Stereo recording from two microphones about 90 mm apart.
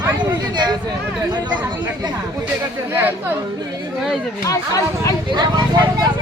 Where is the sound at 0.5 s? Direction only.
50° right (ahead or behind).